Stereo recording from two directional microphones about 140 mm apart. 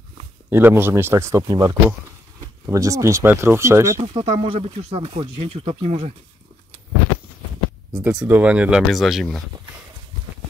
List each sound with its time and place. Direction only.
0.5 s speech: 15° right (ahead or behind)
4.0 s speech: 40° right (ahead or behind)
8.0 s speech: 10° right (ahead or behind)